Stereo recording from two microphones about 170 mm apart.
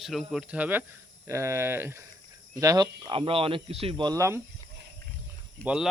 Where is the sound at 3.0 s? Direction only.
30° right (ahead or behind).